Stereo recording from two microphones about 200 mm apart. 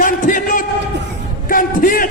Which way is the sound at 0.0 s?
40° left (ahead or behind).